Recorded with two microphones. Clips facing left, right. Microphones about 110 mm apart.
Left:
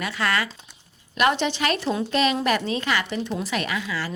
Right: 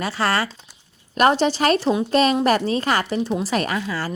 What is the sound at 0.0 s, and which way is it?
Speech, 35° right (ahead or behind).